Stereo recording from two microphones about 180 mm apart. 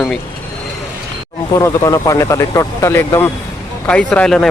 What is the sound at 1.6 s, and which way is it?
Speech, 20° left (ahead or behind).